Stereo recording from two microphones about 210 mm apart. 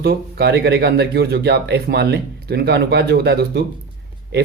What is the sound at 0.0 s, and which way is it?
Speech, 50° right (ahead or behind).